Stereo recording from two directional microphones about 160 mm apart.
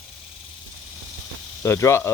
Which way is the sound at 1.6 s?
20° left (ahead or behind).